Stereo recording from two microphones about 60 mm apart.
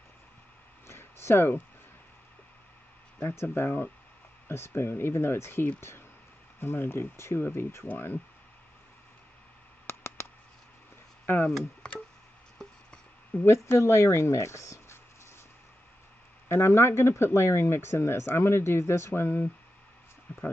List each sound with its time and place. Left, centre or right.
0.8 s a sound: left
3.2 s speech: left
9.8 s a sound: left
11.8 s tick: centre
13.5 s speech: left
16.4 s speech: left
20.3 s speech: left